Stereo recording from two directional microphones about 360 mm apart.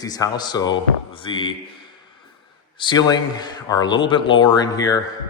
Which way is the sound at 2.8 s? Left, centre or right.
Centre.